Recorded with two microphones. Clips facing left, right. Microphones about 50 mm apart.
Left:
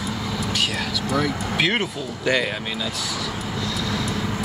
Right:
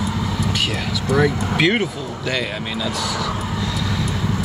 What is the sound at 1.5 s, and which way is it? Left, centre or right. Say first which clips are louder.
Speech: right 1 dB; centre.